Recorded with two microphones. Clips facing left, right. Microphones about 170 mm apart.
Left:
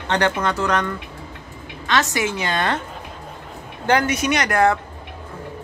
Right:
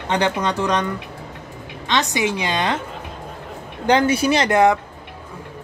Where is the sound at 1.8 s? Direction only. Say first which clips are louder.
Even; 20° right (ahead or behind).